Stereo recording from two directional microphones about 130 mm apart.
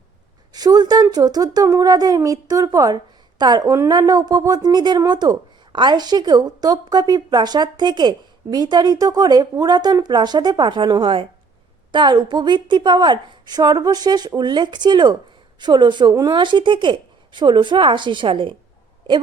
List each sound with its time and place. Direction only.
0.5 s a woman's voice: 30° right (ahead or behind)